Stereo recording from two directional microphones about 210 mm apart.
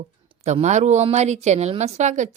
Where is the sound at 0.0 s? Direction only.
30° right (ahead or behind).